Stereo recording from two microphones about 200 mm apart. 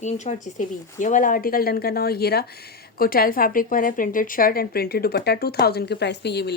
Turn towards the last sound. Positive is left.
turn(degrees=55)  # may be behind; listen again after turning